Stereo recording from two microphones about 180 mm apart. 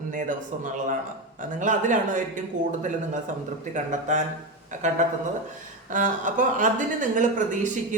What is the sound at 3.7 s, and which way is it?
Speech, 45° right (ahead or behind).